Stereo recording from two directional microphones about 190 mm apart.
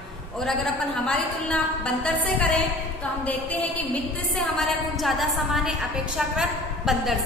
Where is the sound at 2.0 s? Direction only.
5° left (ahead or behind).